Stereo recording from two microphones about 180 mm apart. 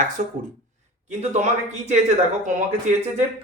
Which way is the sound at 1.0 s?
40° right (ahead or behind).